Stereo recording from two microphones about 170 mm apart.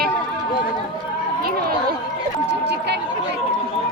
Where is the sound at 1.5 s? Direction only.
60° right (ahead or behind).